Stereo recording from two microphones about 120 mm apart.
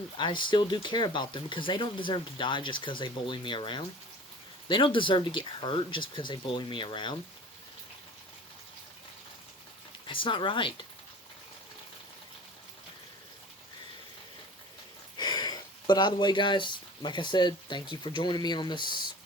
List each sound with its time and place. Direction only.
0.2 s speech: 40° left (ahead or behind)
10.1 s speech: 45° left (ahead or behind)
15.2 s speech: 35° left (ahead or behind)